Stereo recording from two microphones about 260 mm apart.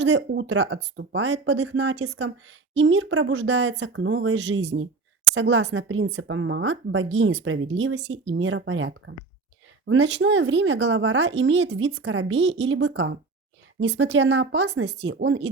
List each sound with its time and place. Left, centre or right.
0.0 s speech: right